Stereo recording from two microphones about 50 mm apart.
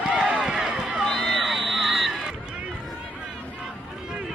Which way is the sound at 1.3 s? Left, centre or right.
Centre.